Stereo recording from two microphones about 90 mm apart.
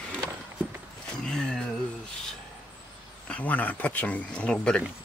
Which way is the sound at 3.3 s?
15° left (ahead or behind).